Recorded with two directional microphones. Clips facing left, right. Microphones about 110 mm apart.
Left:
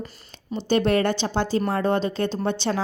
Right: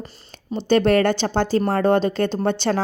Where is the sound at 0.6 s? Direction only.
65° right (ahead or behind).